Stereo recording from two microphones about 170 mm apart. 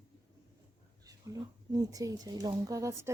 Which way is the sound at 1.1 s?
20° right (ahead or behind).